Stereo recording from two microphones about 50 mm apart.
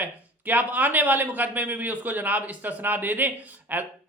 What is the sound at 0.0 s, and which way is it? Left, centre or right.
A man's voice, right.